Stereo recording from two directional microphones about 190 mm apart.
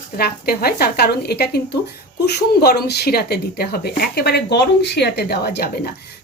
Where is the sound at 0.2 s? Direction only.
55° left (ahead or behind).